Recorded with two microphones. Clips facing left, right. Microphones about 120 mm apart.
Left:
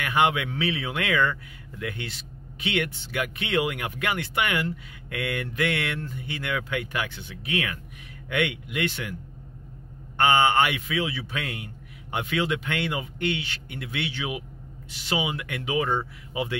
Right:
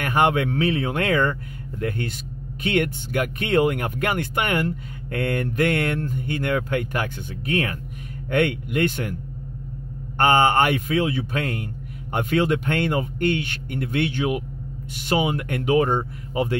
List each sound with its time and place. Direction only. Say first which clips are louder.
0.0 s speech: right 3 dB; 45° right (ahead or behind)
10.1 s speech: right 3 dB; 45° right (ahead or behind)